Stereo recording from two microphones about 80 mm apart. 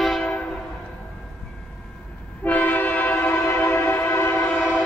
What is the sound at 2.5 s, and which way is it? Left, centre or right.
Train, left.